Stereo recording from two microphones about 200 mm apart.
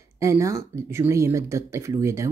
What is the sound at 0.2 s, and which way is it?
Speech, 15° right (ahead or behind).